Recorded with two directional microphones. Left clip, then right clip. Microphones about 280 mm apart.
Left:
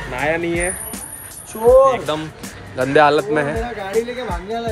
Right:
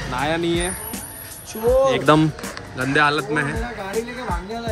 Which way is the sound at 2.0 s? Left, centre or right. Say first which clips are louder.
Right 7 dB; right.